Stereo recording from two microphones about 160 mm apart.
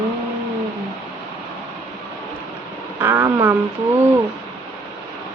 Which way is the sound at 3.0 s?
15° right (ahead or behind).